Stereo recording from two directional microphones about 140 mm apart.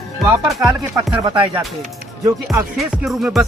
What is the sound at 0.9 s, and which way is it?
Speech, 30° right (ahead or behind).